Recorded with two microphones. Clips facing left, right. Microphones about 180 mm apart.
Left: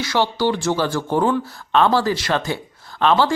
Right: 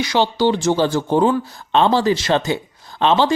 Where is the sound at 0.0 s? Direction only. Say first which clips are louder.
Right 3 dB; 20° right (ahead or behind).